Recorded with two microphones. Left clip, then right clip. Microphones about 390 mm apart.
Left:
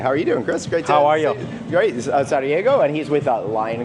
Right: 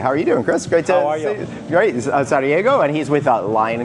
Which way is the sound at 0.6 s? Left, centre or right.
Right.